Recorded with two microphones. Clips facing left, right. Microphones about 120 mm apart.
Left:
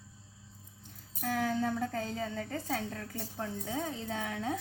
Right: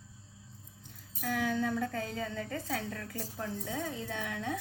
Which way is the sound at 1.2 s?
30° left (ahead or behind).